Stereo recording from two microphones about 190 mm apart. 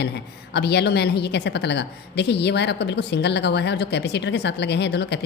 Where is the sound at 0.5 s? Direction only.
60° left (ahead or behind).